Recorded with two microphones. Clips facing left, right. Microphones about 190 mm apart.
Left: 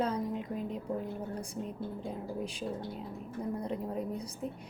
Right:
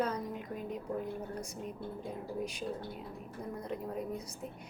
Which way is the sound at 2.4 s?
30° left (ahead or behind).